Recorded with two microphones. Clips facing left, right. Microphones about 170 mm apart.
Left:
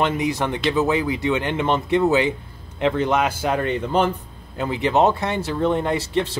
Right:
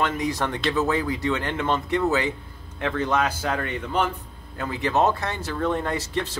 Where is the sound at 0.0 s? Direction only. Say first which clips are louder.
Left 3 dB; 20° left (ahead or behind).